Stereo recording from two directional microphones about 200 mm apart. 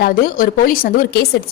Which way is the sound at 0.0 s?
45° left (ahead or behind).